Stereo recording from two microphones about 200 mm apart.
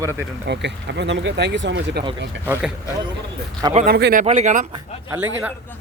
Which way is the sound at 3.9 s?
50° right (ahead or behind).